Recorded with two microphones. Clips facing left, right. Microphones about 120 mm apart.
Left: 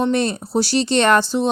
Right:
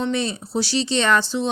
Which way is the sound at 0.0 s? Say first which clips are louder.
Left 5 dB; 55° left (ahead or behind).